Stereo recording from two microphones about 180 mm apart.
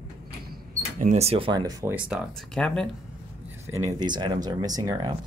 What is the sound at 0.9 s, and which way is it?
Speech, 40° right (ahead or behind).